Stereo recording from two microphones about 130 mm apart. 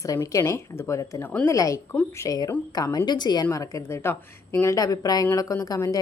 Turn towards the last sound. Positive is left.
turn(degrees=25)  # may be behind; listen again after turning